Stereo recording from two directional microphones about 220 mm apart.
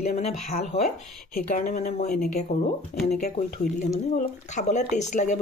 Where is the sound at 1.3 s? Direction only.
40° left (ahead or behind).